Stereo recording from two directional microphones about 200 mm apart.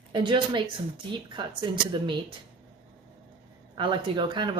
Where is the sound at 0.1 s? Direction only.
25° right (ahead or behind).